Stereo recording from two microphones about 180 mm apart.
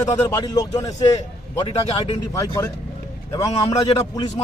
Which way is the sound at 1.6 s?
30° left (ahead or behind).